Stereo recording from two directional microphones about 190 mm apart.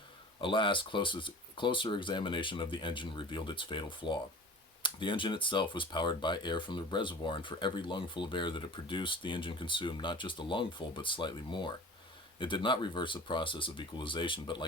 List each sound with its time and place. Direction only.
0.4 s speech: 25° left (ahead or behind)